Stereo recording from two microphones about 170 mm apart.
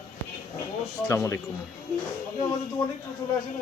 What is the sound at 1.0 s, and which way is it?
Speech, 15° left (ahead or behind).